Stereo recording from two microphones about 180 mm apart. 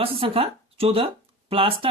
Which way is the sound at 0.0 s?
30° right (ahead or behind).